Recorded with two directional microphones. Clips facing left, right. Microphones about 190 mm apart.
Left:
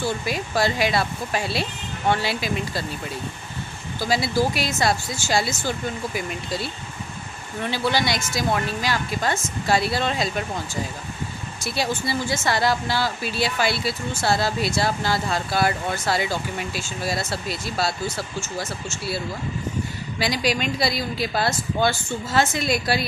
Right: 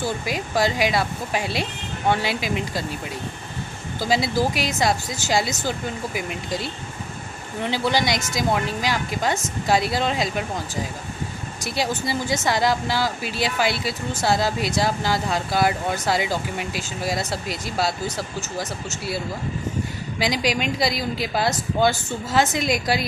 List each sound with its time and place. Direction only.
0.0 s speech: 15° right (ahead or behind)
4.1 s speech: 20° right (ahead or behind)
11.6 s speech: 15° right (ahead or behind)
20.2 s speech: 15° right (ahead or behind)